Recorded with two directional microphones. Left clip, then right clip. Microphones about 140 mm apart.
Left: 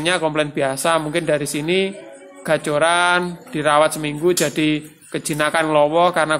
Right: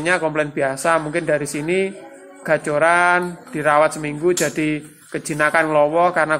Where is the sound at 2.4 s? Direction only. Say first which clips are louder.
Even; 20° left (ahead or behind).